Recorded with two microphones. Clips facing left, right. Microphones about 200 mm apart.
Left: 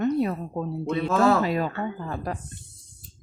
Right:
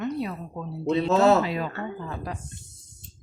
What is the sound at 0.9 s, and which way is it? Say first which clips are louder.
Speech: right 4 dB; 25° right (ahead or behind).